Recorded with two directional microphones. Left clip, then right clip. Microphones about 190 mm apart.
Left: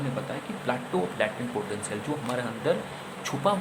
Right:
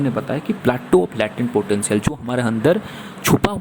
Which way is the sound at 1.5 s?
35° right (ahead or behind).